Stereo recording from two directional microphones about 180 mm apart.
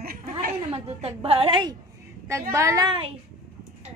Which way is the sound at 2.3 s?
15° right (ahead or behind).